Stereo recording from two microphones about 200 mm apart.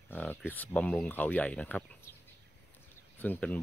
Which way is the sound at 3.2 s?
5° left (ahead or behind).